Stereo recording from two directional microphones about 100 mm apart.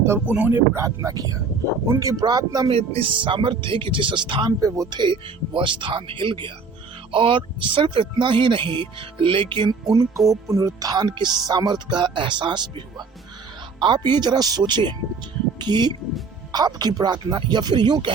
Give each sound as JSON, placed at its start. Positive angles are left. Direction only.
{"t": 0.3, "sound": "speech", "side_deg": -15}
{"t": 2.6, "sound": "speech", "side_deg": -75}
{"t": 4.6, "sound": "speech", "side_deg": -35}